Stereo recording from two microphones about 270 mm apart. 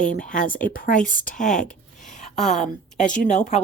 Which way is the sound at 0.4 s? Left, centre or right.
Left.